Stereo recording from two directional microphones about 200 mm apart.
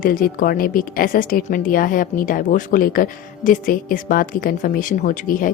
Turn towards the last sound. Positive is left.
turn(degrees=45)  # may be behind; listen again after turning